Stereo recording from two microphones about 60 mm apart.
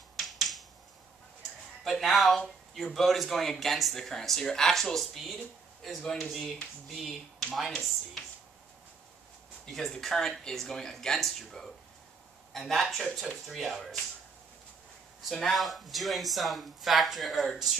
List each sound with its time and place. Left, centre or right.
0.1 s finger snapping: centre
1.9 s speech: centre
9.7 s speech: centre
15.3 s speech: centre